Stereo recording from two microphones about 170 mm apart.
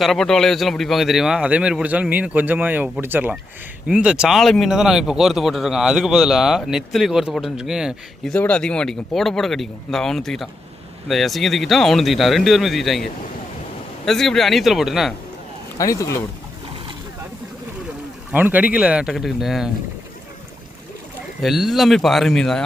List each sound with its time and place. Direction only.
0.0 s speech: centre (ahead or behind)
15.8 s speech: 20° left (ahead or behind)
18.3 s speech: 10° right (ahead or behind)
21.4 s speech: centre (ahead or behind)